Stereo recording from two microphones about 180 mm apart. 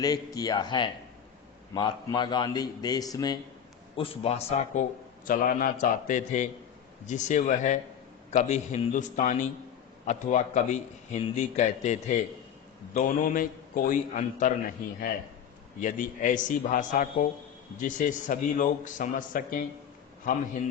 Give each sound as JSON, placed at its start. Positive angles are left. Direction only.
{"t": 0.3, "sound": "a man's voice", "side_deg": 20}
{"t": 3.9, "sound": "a man's voice", "side_deg": 30}
{"t": 5.2, "sound": "a man's voice", "side_deg": 50}
{"t": 15.8, "sound": "a man's voice", "side_deg": 45}